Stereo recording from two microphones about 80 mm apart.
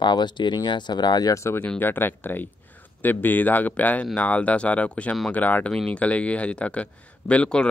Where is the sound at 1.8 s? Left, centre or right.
Left.